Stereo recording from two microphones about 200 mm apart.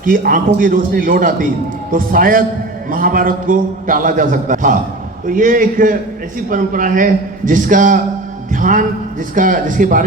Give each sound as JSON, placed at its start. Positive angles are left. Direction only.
{"t": 0.0, "sound": "a man's voice", "side_deg": -45}